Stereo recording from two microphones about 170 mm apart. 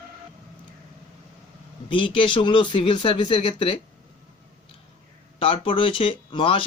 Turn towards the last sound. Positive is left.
turn(degrees=30)  # may be behind; listen again after turning